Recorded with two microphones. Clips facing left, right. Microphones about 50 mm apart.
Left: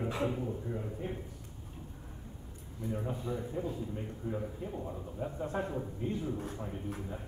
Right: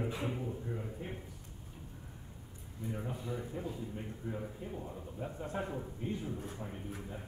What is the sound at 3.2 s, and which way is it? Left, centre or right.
A man's voice, centre.